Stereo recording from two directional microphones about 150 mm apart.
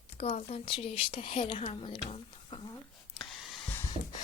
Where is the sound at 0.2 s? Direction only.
45° left (ahead or behind).